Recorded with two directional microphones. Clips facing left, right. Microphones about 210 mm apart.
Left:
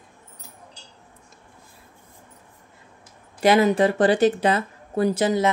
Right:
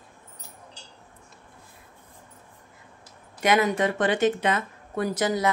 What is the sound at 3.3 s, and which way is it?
Speech, 30° left (ahead or behind).